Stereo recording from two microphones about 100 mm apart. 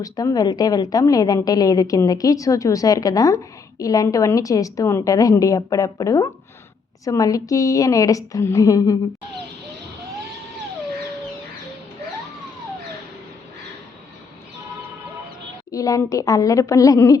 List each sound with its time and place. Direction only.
0.0 s a woman's voice: 35° left (ahead or behind)
15.7 s a woman's voice: 35° left (ahead or behind)